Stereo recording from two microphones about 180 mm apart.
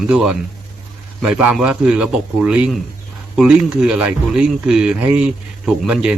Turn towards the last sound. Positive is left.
turn(degrees=-5)  # may be behind; listen again after turning